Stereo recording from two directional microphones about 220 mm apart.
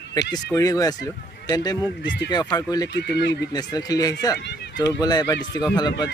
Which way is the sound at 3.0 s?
50° left (ahead or behind).